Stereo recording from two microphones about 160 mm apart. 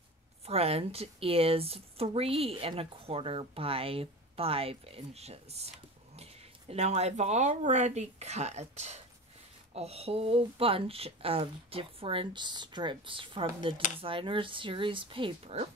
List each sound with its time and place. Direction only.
0.5 s speech: 40° right (ahead or behind)
6.7 s speech: 45° right (ahead or behind)